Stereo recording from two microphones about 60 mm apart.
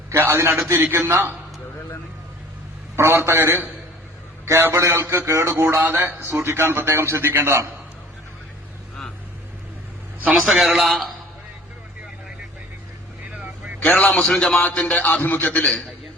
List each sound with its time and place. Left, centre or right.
0.1 s a man's voice: right
2.9 s a man's voice: right
5.8 s a man's voice: right
6.1 s a man's voice: right
10.3 s a man's voice: centre
13.3 s vehicle: right
13.7 s a man's voice: left
14.3 s a man's voice: centre
14.6 s a man's voice: left